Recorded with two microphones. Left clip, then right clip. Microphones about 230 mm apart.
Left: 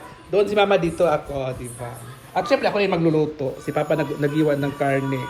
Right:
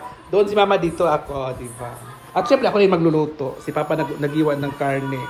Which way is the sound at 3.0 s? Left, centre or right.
Right.